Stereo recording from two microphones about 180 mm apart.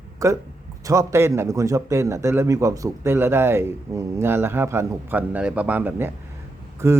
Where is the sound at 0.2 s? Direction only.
20° right (ahead or behind).